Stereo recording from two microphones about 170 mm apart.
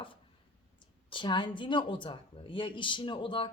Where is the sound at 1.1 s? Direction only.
30° left (ahead or behind).